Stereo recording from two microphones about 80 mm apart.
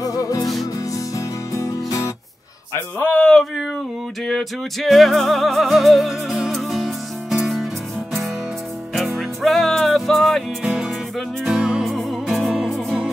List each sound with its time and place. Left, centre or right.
0.0 s music: left
2.7 s a sound: centre
4.3 s music: centre
8.9 s music: centre